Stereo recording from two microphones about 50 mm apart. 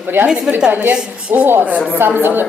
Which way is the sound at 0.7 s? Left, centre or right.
Right.